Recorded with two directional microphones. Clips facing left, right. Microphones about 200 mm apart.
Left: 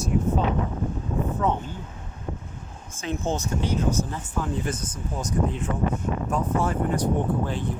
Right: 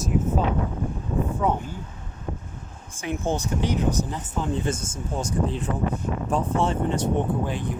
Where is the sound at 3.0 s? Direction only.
15° right (ahead or behind).